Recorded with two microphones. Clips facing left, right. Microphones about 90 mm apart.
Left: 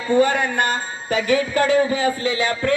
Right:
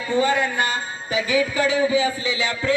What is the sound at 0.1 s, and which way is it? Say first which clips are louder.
Music: left 3 dB; 55° left (ahead or behind).